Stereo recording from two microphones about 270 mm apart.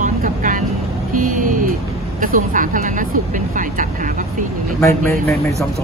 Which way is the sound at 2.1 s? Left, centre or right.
Right.